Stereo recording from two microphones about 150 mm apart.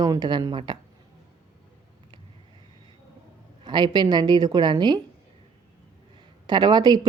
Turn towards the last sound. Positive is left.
turn(degrees=-25)  # may be behind; listen again after turning